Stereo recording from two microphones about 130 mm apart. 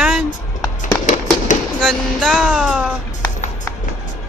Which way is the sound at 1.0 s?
70° left (ahead or behind).